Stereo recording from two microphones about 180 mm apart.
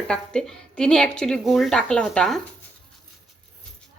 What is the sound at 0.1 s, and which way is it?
A woman's voice, 5° left (ahead or behind).